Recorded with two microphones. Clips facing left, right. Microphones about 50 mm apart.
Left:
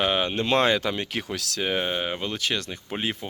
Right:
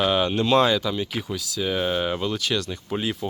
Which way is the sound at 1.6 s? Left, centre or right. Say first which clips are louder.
Right 3 dB; left.